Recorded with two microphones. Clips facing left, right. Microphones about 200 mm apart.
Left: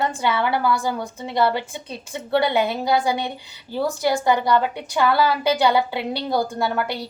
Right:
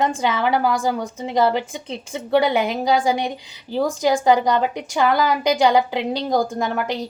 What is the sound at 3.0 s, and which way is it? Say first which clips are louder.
Speech: right 3 dB; 15° right (ahead or behind).